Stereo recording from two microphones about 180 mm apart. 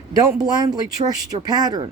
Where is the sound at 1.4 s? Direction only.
20° right (ahead or behind).